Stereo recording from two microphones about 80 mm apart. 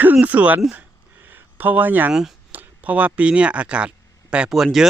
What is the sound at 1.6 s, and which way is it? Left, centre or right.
Speech, right.